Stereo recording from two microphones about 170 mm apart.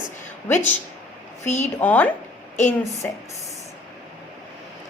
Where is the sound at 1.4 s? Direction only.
40° left (ahead or behind).